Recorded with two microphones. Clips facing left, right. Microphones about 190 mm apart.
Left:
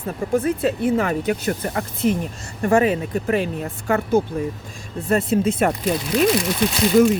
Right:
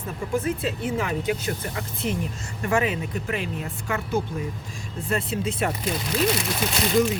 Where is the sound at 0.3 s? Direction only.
50° left (ahead or behind).